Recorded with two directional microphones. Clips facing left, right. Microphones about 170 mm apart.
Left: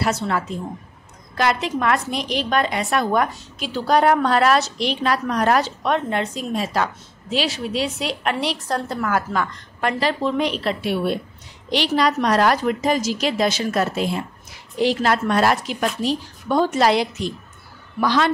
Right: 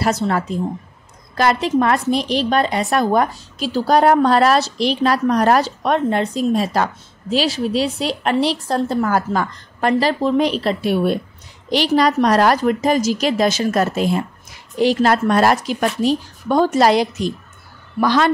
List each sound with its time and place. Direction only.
0.0 s a woman's voice: 40° right (ahead or behind)